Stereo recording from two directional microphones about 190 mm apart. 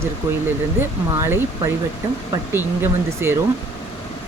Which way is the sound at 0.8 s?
10° right (ahead or behind).